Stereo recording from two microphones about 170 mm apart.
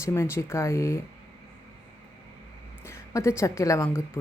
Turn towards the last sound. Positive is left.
turn(degrees=15)  # may be behind; listen again after turning